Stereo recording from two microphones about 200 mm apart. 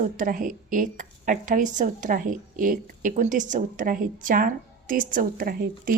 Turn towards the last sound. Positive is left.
turn(degrees=-45)  # may be behind; listen again after turning